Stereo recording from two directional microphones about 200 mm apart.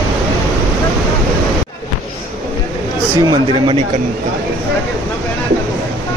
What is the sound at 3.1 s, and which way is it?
Speech, 20° right (ahead or behind).